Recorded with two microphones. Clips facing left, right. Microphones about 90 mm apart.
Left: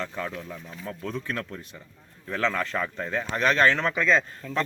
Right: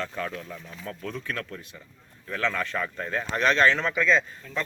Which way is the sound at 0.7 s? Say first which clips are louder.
Left 2 dB; 30° left (ahead or behind).